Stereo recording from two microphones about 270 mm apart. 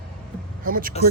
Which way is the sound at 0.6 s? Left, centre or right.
Right.